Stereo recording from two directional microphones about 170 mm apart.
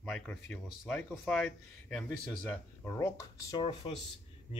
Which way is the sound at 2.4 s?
15° left (ahead or behind).